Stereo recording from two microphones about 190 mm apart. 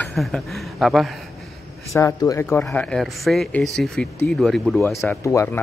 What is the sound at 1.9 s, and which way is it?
Speech, 20° left (ahead or behind).